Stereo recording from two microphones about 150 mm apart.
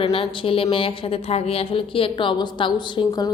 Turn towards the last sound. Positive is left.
turn(degrees=30)  # may be behind; listen again after turning